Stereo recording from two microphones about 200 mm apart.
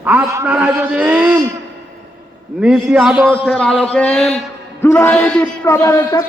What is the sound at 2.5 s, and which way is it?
A man's voice, 5° right (ahead or behind).